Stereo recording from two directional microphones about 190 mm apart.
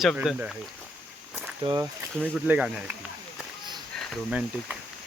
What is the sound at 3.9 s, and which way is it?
Speech, 5° right (ahead or behind).